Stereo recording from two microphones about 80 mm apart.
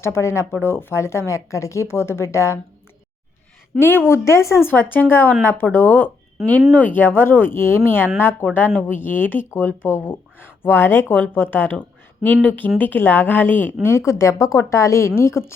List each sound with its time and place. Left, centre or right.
0.0 s speech: left
3.8 s speech: left
4.6 s speech: left
6.4 s speech: centre
6.7 s speech: left
13.8 s speech: left